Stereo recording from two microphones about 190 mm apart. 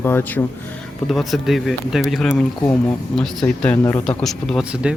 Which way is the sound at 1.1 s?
Centre (ahead or behind).